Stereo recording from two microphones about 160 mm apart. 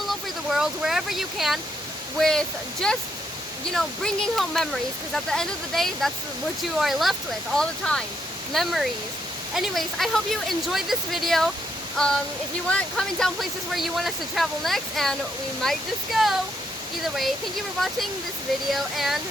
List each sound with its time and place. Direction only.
0.1 s speech: 5° right (ahead or behind)
18.7 s speech: centre (ahead or behind)